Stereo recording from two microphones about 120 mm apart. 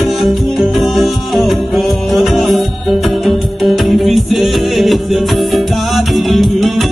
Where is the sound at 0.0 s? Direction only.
Centre (ahead or behind).